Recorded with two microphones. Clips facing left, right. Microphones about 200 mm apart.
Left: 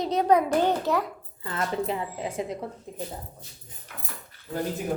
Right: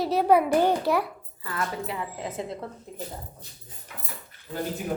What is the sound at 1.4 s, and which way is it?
Speech, 25° left (ahead or behind).